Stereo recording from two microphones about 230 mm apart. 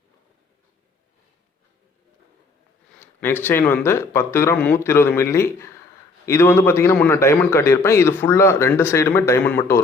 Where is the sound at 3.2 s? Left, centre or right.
Centre.